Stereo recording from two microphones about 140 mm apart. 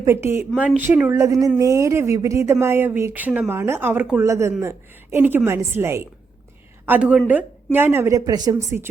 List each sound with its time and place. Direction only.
0.0 s speech: 20° right (ahead or behind)
0.5 s speech: centre (ahead or behind)
0.8 s a woman's voice: 10° right (ahead or behind)
4.2 s a woman's voice: 20° right (ahead or behind)